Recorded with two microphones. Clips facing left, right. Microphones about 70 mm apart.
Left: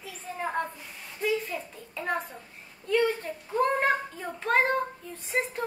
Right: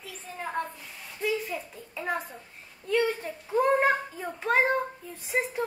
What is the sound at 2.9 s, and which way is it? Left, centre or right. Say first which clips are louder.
Child singing: left 1 dB; centre.